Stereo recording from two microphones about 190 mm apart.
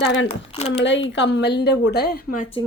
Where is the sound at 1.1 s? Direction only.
65° left (ahead or behind).